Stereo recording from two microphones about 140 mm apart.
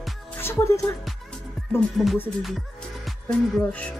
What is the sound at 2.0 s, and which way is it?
Music, 5° left (ahead or behind).